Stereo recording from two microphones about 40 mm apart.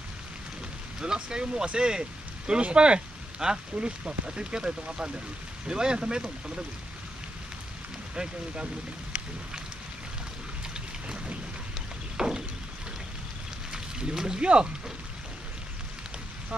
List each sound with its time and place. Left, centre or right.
1.0 s speech: centre
12.2 s vehicle: centre
13.7 s a sound: centre